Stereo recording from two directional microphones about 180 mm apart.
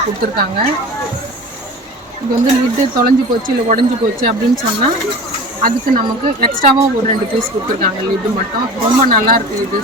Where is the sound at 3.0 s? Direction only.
50° right (ahead or behind).